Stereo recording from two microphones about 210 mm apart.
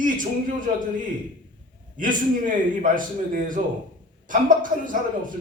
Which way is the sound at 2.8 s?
40° right (ahead or behind).